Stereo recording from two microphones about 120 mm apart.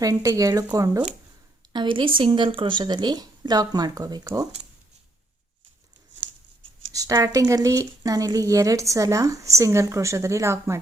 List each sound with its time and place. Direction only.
0.0 s speech: 30° right (ahead or behind)
1.7 s speech: 40° right (ahead or behind)
6.9 s speech: 30° right (ahead or behind)